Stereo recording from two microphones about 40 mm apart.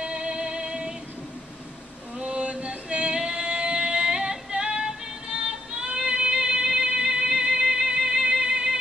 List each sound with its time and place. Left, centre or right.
0.0 s music: right
2.1 s music: right